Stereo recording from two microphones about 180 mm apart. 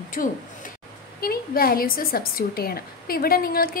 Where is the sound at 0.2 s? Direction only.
50° left (ahead or behind).